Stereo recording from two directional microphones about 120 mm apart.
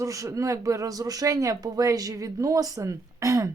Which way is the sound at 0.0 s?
25° right (ahead or behind).